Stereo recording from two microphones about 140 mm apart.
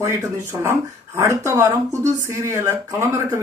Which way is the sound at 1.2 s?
20° right (ahead or behind).